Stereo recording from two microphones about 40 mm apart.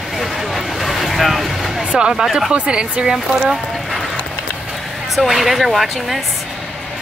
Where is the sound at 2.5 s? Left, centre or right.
Right.